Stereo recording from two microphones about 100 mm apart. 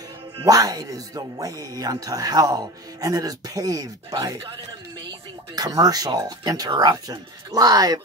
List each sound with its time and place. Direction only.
0.5 s speech: 40° right (ahead or behind)
5.6 s speech: 40° right (ahead or behind)